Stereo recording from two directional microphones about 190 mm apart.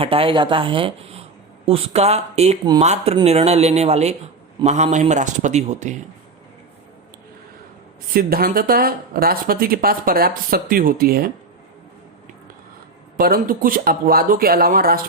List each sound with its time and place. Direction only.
0.0 s speech: 30° right (ahead or behind)
8.1 s speech: 50° right (ahead or behind)
13.1 s speech: 50° right (ahead or behind)